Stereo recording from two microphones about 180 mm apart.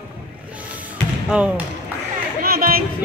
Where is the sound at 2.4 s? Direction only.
55° right (ahead or behind).